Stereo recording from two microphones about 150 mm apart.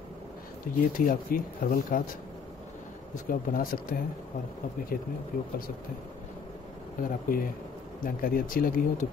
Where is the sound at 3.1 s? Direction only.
65° left (ahead or behind).